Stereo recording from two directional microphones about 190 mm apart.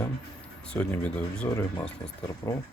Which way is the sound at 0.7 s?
5° left (ahead or behind).